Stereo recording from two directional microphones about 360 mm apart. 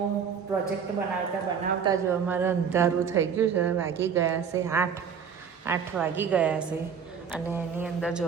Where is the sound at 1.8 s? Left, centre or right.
Centre.